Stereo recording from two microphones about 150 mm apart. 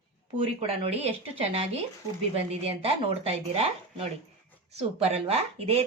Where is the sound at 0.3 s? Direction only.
40° right (ahead or behind).